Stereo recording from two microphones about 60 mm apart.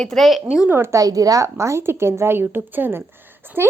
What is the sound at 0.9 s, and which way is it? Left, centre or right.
Speech, right.